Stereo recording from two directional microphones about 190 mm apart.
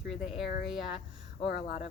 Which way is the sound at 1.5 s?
40° left (ahead or behind).